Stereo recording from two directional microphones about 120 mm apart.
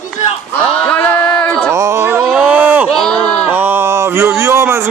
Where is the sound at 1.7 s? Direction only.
25° right (ahead or behind).